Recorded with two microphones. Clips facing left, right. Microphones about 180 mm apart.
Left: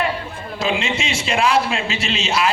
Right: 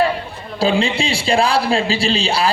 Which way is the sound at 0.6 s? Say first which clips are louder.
Right 5 dB; 30° right (ahead or behind).